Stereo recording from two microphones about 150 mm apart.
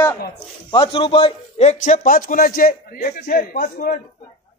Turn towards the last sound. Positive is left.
turn(degrees=70)  # may be behind; listen again after turning